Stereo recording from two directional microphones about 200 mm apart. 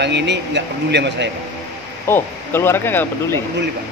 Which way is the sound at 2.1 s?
10° left (ahead or behind).